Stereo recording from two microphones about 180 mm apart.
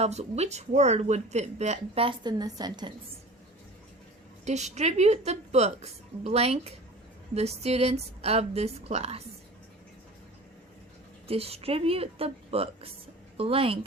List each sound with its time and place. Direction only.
0.0 s speech: 35° right (ahead or behind)
4.4 s speech: 40° right (ahead or behind)
11.3 s a woman's voice: 35° right (ahead or behind)